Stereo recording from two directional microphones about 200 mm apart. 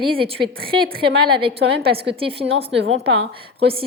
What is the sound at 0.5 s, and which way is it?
Speech, 50° right (ahead or behind).